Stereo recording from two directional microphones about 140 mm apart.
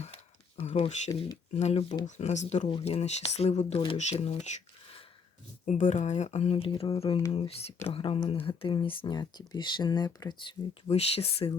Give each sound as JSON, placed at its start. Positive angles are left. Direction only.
{"t": 0.0, "sound": "a sound", "side_deg": 50}
{"t": 1.5, "sound": "speech", "side_deg": 50}
{"t": 2.6, "sound": "speech", "side_deg": 40}
{"t": 5.6, "sound": "speech", "side_deg": 60}
{"t": 10.8, "sound": "speech", "side_deg": 45}